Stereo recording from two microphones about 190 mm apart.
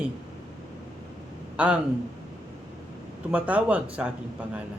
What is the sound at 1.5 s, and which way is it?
Speech, 5° right (ahead or behind).